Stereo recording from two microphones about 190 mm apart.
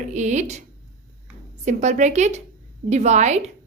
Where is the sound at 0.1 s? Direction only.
40° right (ahead or behind).